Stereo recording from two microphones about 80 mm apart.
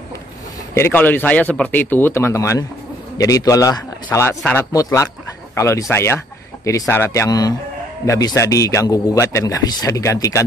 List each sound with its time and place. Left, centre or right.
0.7 s a man's voice: left
7.2 s a man's voice: left
9.1 s a man's voice: left